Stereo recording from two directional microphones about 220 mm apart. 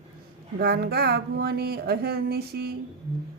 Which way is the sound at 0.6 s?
45° right (ahead or behind).